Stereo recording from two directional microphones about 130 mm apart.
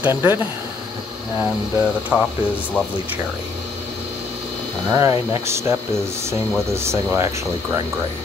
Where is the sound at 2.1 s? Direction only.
5° right (ahead or behind).